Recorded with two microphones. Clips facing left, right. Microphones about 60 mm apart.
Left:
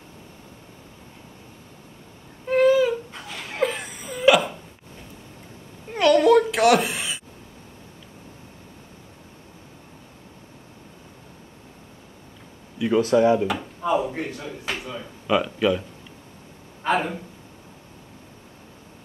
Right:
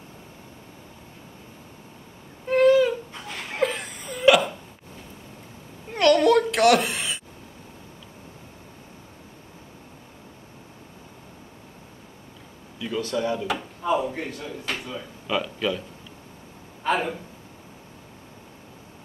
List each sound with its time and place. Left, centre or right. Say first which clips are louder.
2.4 s crying: even; centre
5.9 s a sound: left 2 dB; centre
12.7 s speech: left 9 dB; centre
13.5 s speech: left 1 dB; centre
16.8 s speech: left 1 dB; centre